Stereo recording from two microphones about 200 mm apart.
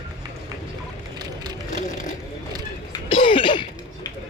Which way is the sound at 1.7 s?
40° left (ahead or behind).